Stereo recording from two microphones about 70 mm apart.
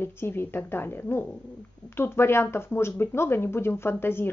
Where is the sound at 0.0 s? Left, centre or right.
Left.